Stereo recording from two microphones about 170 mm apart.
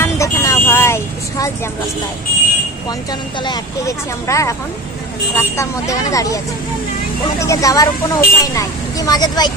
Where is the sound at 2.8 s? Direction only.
25° left (ahead or behind).